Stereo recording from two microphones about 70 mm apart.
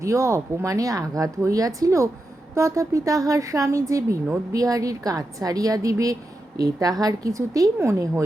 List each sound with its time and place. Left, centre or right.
0.0 s a woman's voice: right
7.8 s a woman's voice: right